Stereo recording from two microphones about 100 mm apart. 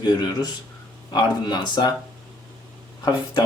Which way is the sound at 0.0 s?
45° left (ahead or behind).